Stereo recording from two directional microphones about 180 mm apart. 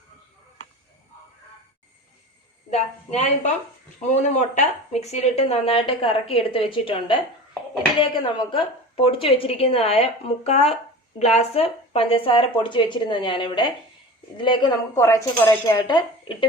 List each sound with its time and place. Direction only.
2.6 s speech: 40° left (ahead or behind)